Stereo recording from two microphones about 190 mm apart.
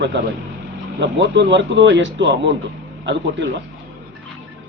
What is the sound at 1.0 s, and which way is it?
A man's voice, 70° right (ahead or behind).